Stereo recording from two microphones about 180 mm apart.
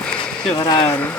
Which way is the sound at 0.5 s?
25° left (ahead or behind).